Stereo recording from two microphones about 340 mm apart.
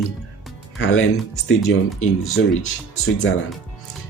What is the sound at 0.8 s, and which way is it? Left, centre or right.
Speech, left.